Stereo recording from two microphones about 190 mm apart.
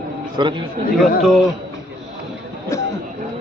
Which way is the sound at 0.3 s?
25° right (ahead or behind).